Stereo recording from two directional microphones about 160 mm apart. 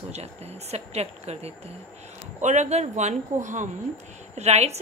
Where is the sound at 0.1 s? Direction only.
40° right (ahead or behind).